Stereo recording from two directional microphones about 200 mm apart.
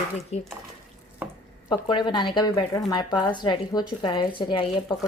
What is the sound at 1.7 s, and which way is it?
A woman's voice, 25° left (ahead or behind).